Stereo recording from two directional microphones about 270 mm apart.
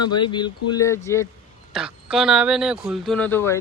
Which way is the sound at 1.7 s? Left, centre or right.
Centre.